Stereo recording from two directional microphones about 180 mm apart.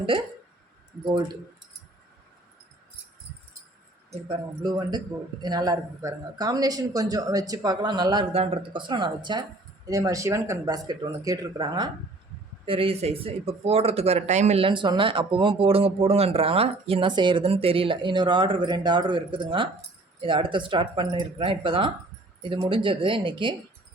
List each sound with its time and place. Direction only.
4.1 s a man's voice: 25° right (ahead or behind)